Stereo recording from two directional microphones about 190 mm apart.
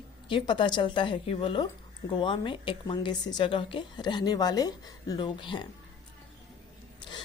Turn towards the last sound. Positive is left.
turn(degrees=25)  # may be behind; listen again after turning